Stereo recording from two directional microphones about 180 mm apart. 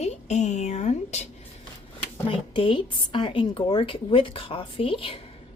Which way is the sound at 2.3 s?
25° left (ahead or behind).